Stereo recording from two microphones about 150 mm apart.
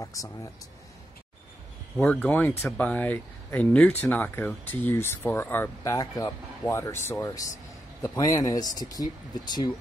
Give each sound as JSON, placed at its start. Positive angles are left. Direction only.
{"t": 0.0, "sound": "speech", "side_deg": 20}
{"t": 2.0, "sound": "speech", "side_deg": 10}
{"t": 5.9, "sound": "speech", "side_deg": 25}